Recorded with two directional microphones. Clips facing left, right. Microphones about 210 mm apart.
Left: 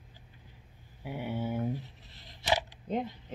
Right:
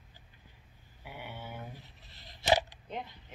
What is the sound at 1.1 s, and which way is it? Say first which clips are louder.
Speech: left 10 dB; 30° left (ahead or behind).